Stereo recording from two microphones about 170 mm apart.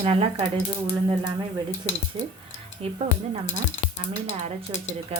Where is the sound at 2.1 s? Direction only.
35° right (ahead or behind).